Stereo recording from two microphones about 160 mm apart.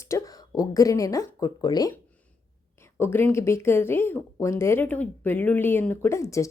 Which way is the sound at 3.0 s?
15° left (ahead or behind).